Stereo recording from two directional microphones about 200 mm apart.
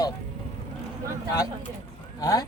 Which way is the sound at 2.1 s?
15° left (ahead or behind).